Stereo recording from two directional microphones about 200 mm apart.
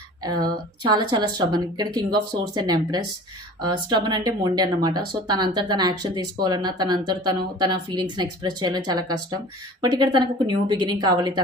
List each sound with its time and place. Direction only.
0.4 s speech: 20° right (ahead or behind)